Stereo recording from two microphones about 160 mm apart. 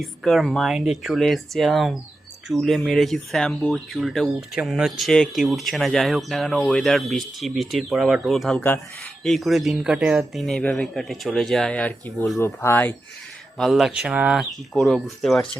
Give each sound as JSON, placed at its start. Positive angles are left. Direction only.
{"t": 0.0, "sound": "speech", "side_deg": 0}
{"t": 13.6, "sound": "speech", "side_deg": 0}